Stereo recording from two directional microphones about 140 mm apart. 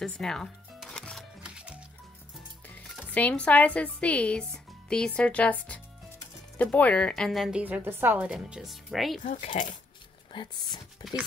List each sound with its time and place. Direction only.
0.0 s music: 5° left (ahead or behind)
1.4 s music: 10° right (ahead or behind)
3.2 s a woman's voice: 10° left (ahead or behind)
9.6 s speech: 50° left (ahead or behind)
10.3 s speech: 30° left (ahead or behind)